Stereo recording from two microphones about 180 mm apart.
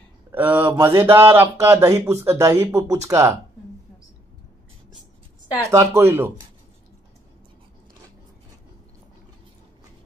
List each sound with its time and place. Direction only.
0.3 s speech: 10° right (ahead or behind)
5.5 s speech: 15° right (ahead or behind)